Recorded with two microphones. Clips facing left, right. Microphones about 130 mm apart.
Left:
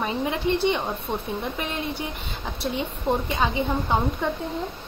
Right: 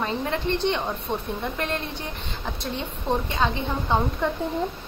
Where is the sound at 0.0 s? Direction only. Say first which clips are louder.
Left 1 dB; 10° left (ahead or behind).